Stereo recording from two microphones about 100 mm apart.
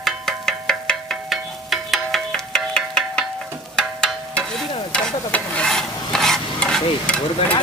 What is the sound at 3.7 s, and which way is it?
Stir, 10° left (ahead or behind).